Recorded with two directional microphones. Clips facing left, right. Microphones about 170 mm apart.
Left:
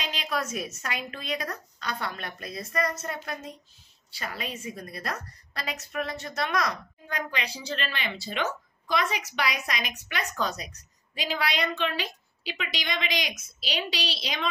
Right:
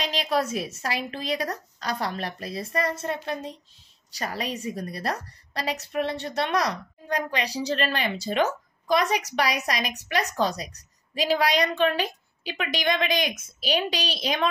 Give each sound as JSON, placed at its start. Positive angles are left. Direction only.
{"t": 0.0, "sound": "a woman's voice", "side_deg": -35}